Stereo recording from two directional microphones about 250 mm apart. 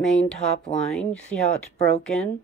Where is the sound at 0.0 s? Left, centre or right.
Centre.